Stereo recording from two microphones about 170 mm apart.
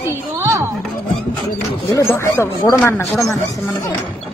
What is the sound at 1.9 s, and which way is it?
Speech, 15° left (ahead or behind).